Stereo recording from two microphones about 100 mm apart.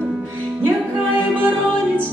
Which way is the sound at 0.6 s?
20° right (ahead or behind).